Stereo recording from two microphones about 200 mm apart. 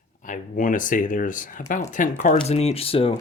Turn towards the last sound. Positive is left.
turn(degrees=30)  # may be behind; listen again after turning